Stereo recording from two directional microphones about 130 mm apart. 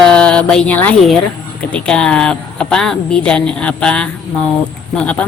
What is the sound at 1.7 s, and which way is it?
Speech, 5° left (ahead or behind).